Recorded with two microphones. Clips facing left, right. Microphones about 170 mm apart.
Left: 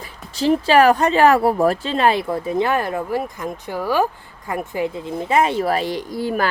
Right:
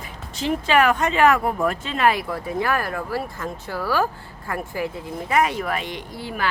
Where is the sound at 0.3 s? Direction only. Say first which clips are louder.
Left 5 dB; 35° left (ahead or behind).